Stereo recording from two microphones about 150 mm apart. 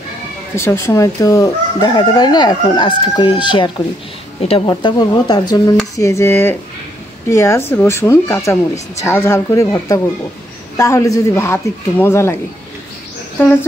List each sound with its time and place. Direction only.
0.6 s chicken: 15° left (ahead or behind)
3.2 s speech: 30° left (ahead or behind)
4.6 s chicken: 30° left (ahead or behind)
5.9 s a woman's voice: 20° left (ahead or behind)
8.9 s chicken: 15° left (ahead or behind)
10.8 s a woman's voice: 20° left (ahead or behind)
13.4 s a woman's voice: 15° left (ahead or behind)